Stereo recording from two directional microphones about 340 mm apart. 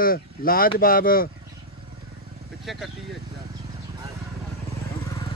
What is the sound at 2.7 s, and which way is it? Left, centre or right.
Speech, centre.